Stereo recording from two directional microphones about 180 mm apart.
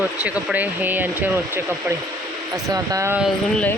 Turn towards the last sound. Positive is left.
turn(degrees=5)  # may be behind; listen again after turning